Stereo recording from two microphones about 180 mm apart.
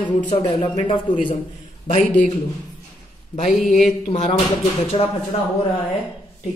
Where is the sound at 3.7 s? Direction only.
40° left (ahead or behind).